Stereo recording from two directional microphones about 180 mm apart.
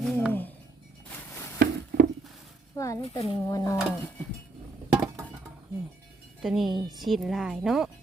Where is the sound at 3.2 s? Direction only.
20° left (ahead or behind).